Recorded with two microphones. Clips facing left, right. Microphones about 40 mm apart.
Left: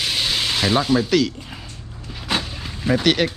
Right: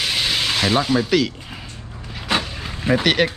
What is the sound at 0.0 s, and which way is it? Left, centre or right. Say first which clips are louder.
Ratchet: right 1 dB; centre.